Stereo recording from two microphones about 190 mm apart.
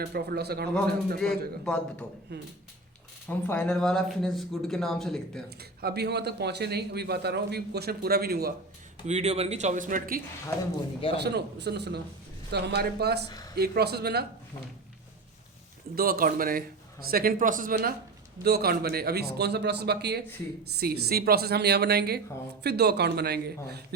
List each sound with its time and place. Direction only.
0.0 s a man's voice: 55° right (ahead or behind)
1.2 s speech: 5° left (ahead or behind)
2.3 s a man's voice: 65° right (ahead or behind)
3.2 s speech: 10° left (ahead or behind)
5.5 s a man's voice: 55° right (ahead or behind)
9.0 s speech: 35° right (ahead or behind)
11.2 s a man's voice: 60° right (ahead or behind)
16.0 s a man's voice: 50° right (ahead or behind)